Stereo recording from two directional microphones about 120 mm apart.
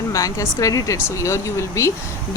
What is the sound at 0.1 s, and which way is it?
Speech, 30° left (ahead or behind).